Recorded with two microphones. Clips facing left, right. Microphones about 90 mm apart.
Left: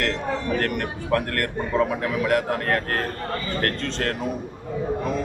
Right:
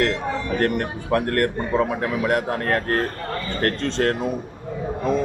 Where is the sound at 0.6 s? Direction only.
25° right (ahead or behind).